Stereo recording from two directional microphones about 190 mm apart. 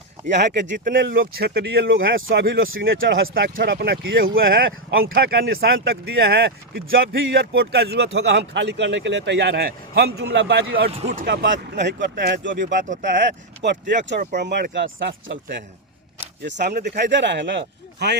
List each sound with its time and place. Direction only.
0.3 s speech: 65° right (ahead or behind); by 2.3 s 85° right
2.3 s speech: 55° right (ahead or behind)
2.9 s speech: 90° right
3.3 s speech: 55° right (ahead or behind); by 4.2 s 70° right (ahead or behind)
4.4 s speech: 50° right (ahead or behind)
5.1 s speech: 65° right (ahead or behind)
7.3 s speech: 65° right (ahead or behind)
11.0 s speech: 45° right (ahead or behind); by 12.5 s 65° right (ahead or behind)
13.6 s speech: 70° right (ahead or behind)
14.2 s speech: 40° right (ahead or behind)
14.4 s speech: 65° right (ahead or behind)
16.6 s speech: 55° right (ahead or behind)
17.1 s speech: 75° right (ahead or behind)